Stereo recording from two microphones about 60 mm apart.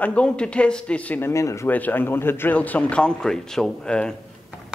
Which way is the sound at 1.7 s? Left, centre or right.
Left.